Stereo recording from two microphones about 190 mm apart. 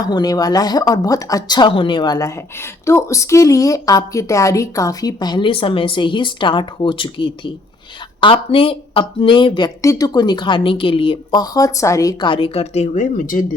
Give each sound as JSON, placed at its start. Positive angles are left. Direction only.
{"t": 0.1, "sound": "speech", "side_deg": 20}